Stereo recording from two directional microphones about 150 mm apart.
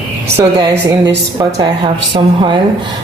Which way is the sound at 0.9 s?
20° right (ahead or behind).